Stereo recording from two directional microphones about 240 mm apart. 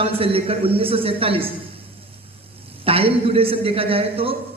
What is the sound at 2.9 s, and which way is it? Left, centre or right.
A man's voice, right.